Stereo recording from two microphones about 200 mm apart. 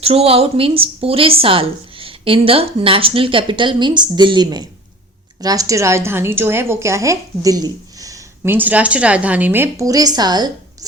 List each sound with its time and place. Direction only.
0.0 s a woman's voice: 30° right (ahead or behind)